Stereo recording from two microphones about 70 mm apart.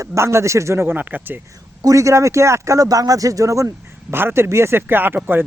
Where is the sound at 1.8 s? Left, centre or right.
Right.